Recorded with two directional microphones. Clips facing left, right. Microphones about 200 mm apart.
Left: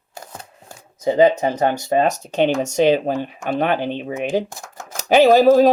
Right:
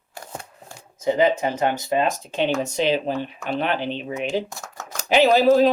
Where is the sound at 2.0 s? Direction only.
45° left (ahead or behind).